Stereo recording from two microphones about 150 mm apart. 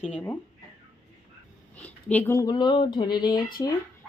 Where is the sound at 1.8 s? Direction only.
10° left (ahead or behind); by 3.6 s 30° left (ahead or behind).